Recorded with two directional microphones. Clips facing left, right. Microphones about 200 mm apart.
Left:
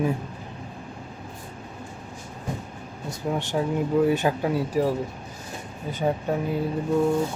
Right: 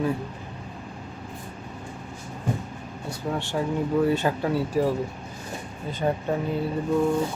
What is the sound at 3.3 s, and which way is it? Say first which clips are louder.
Speech: left 2 dB; 15° left (ahead or behind).